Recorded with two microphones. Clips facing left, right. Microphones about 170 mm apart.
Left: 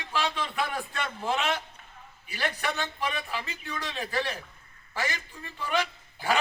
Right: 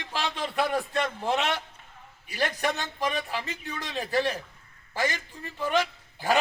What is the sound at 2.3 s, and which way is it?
A man's voice, 40° right (ahead or behind).